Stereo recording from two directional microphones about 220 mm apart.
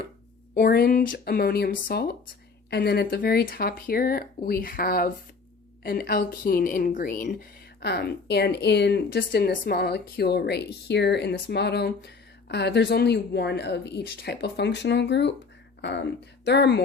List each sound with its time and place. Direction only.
0.5 s a woman's voice: 45° left (ahead or behind)